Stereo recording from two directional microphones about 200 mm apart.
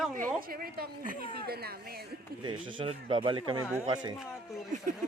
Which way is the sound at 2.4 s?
25° right (ahead or behind).